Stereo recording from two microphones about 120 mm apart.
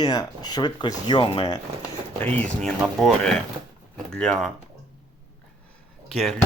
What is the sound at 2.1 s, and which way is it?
Speech, 15° left (ahead or behind).